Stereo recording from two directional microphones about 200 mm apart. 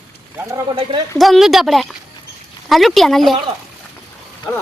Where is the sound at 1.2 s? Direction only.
Centre (ahead or behind).